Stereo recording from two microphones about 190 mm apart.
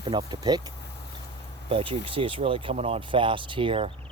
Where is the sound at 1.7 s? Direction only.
30° right (ahead or behind).